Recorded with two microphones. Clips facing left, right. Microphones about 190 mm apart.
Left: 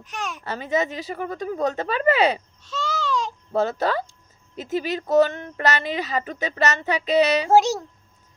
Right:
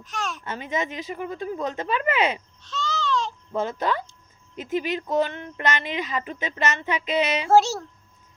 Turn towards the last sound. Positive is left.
turn(degrees=15)  # may be behind; listen again after turning